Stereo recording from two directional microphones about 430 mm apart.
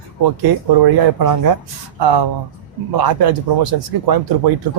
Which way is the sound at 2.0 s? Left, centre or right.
Right.